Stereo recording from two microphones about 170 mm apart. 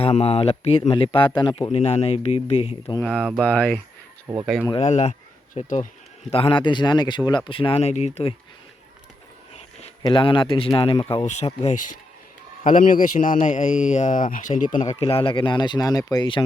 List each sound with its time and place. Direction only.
0.0 s speech: 35° left (ahead or behind)
1.7 s speech: 40° left (ahead or behind)
3.0 s speech: 5° left (ahead or behind)
4.3 s speech: 5° right (ahead or behind)
4.7 s a man's voice: 40° left (ahead or behind)
6.3 s speech: 30° left (ahead or behind)
10.0 s a man's voice: 30° left (ahead or behind)